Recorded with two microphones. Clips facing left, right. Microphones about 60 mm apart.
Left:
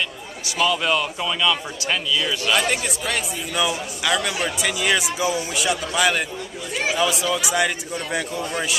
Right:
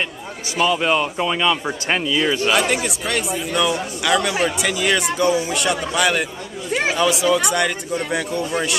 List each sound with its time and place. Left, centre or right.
0.6 s speech: right
2.5 s speech: centre